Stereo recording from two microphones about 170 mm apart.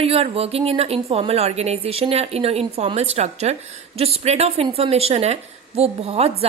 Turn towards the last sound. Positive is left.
turn(degrees=-35)  # may be behind; listen again after turning